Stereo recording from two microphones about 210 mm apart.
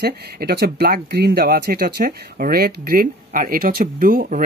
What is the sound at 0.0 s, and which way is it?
Speech, 50° right (ahead or behind).